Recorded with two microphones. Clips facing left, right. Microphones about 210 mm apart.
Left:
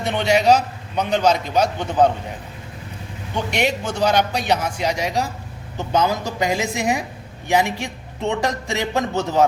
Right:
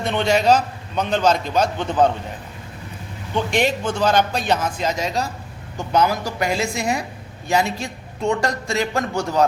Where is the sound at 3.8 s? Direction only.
10° left (ahead or behind).